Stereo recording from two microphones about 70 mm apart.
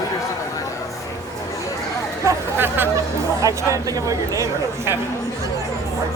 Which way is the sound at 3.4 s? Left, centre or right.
Right.